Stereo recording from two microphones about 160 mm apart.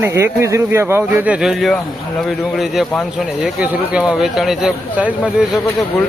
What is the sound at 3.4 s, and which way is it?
Speech, 5° right (ahead or behind).